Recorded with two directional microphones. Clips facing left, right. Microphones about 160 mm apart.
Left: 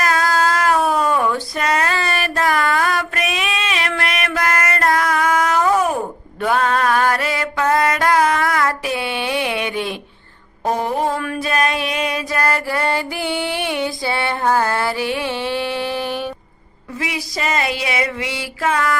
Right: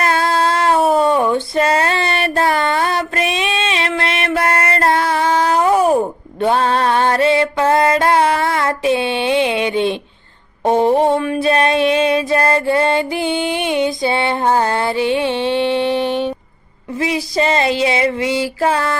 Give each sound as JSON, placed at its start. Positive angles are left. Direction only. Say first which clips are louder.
{"t": 0.0, "sound": "female singing", "louder": "right 2 dB", "side_deg": -30}
{"t": 6.4, "sound": "music", "louder": "right 3 dB", "side_deg": -30}
{"t": 10.7, "sound": "a sound", "louder": "right 7 dB", "side_deg": -30}